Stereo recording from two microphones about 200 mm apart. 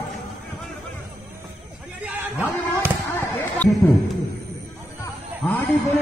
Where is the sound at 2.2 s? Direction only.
10° right (ahead or behind).